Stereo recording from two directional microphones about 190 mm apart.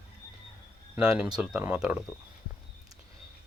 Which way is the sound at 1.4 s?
5° right (ahead or behind).